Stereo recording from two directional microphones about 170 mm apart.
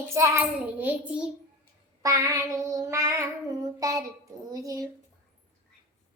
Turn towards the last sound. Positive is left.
turn(degrees=-20)  # may be behind; listen again after turning